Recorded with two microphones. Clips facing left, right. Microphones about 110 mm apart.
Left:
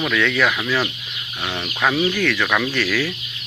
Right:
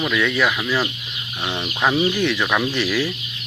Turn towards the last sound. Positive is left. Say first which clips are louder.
# even
turn(degrees=-15)  # may be behind; listen again after turning